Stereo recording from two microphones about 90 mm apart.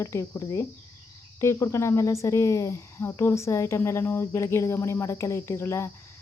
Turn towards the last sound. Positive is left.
turn(degrees=30)  # may be behind; listen again after turning